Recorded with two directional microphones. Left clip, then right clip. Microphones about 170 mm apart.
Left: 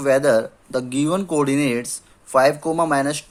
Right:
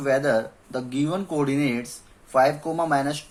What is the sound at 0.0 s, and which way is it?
Speech, 55° left (ahead or behind).